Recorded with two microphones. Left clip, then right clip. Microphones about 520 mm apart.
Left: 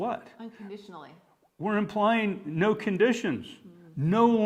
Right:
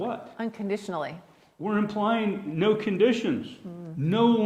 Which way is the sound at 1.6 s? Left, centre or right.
Left.